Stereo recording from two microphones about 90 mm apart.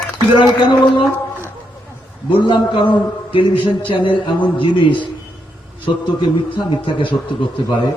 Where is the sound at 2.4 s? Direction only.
60° left (ahead or behind).